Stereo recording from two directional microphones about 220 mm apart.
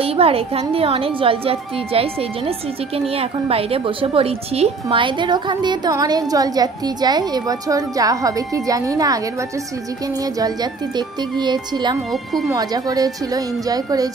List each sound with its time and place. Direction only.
0.0 s a woman's voice: 25° right (ahead or behind)
10.4 s a woman's voice: 20° right (ahead or behind)